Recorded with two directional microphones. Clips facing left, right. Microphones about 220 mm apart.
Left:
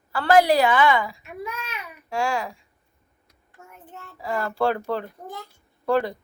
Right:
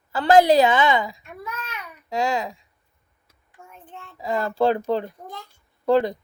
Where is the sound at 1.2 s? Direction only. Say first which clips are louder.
Left 2 dB; 10° left (ahead or behind).